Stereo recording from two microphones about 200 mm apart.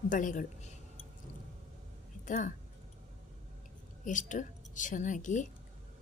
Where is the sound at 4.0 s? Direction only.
40° left (ahead or behind).